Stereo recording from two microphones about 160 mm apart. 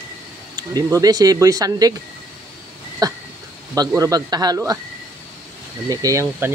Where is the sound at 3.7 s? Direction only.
20° right (ahead or behind).